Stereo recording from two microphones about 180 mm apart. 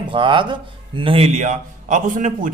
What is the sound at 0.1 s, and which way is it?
A man's voice, 25° right (ahead or behind).